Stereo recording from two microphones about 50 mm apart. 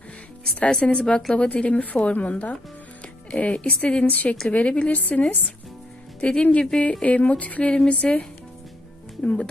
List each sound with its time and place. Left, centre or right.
0.6 s a woman's voice: centre
6.2 s a woman's voice: left
9.2 s a woman's voice: left